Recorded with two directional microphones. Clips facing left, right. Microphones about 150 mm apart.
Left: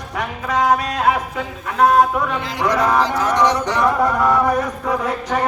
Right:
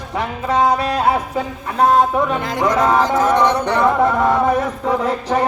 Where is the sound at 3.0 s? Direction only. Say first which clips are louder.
Right 2 dB; 50° right (ahead or behind).